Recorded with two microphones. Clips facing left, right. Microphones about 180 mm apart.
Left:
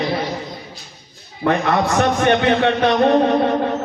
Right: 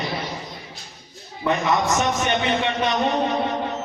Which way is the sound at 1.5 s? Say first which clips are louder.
Left 4 dB; 60° left (ahead or behind).